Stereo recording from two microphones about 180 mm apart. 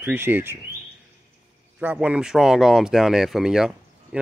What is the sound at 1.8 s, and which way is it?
Speech, 5° right (ahead or behind).